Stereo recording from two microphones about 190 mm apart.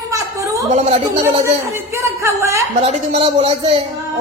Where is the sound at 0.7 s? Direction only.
35° right (ahead or behind).